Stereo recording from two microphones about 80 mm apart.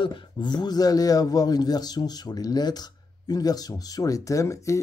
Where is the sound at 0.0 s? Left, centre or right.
Left.